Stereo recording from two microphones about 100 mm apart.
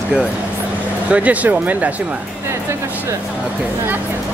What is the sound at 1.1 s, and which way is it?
Speech, 15° right (ahead or behind).